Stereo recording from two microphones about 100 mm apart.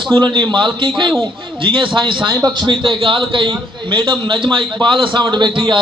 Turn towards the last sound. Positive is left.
turn(degrees=-50)  # may be behind; listen again after turning